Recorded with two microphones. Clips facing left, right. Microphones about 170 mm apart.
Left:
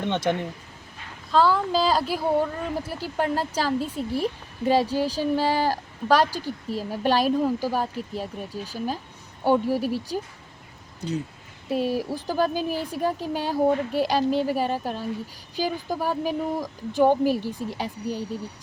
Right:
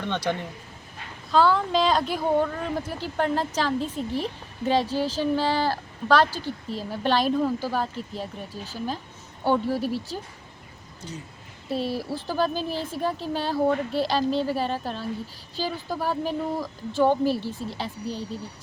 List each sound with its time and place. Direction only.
0.0 s speech: 20° left (ahead or behind)
1.3 s a woman's voice: centre (ahead or behind)
11.7 s a woman's voice: 10° left (ahead or behind)